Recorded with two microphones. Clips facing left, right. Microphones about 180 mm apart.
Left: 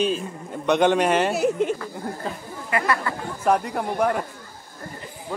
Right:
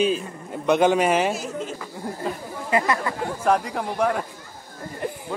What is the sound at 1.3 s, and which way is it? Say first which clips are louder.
Speech: left 8 dB; 65° left (ahead or behind).